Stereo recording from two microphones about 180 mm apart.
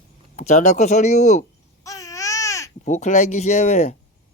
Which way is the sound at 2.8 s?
40° left (ahead or behind).